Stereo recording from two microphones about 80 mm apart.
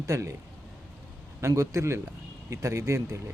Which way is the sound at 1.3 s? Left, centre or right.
Right.